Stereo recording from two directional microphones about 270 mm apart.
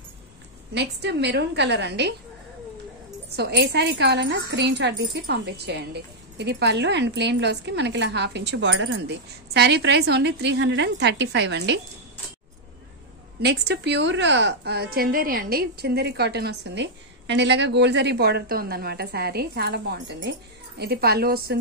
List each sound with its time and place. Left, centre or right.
0.7 s a woman's voice: right
3.3 s a woman's voice: right
13.4 s a woman's voice: right